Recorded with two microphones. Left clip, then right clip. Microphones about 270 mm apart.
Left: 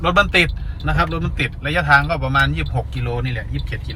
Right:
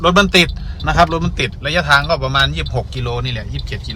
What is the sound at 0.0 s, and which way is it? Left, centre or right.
Speech, centre.